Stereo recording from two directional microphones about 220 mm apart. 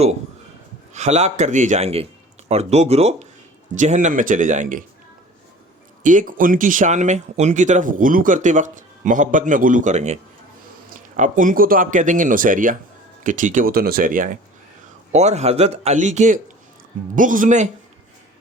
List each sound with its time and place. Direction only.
0.9 s speech: 30° right (ahead or behind)
6.0 s speech: 35° right (ahead or behind)